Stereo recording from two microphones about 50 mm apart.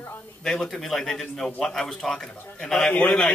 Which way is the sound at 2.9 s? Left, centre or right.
Left.